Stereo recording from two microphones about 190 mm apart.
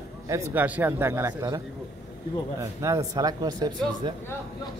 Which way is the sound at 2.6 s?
15° right (ahead or behind).